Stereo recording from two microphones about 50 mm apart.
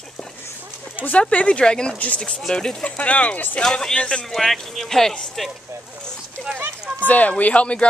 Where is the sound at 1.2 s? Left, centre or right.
Left.